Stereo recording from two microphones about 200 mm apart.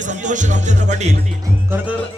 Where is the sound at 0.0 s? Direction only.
40° right (ahead or behind).